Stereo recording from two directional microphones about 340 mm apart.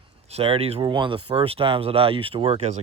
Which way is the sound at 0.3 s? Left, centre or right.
Centre.